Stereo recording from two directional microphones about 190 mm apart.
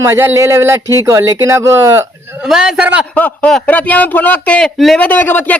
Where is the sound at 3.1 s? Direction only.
5° left (ahead or behind).